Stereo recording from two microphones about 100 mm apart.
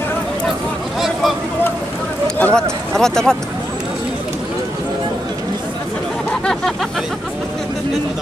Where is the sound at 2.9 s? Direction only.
5° left (ahead or behind).